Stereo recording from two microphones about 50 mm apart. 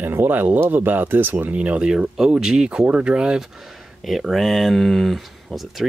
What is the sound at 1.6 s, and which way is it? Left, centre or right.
Speech, right.